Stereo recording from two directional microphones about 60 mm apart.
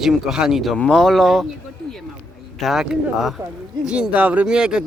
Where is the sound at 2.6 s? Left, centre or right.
Centre.